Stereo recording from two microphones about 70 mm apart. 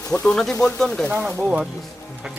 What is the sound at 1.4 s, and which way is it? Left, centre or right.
Speech, centre.